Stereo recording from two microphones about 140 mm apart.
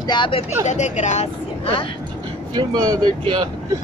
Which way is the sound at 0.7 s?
55° left (ahead or behind).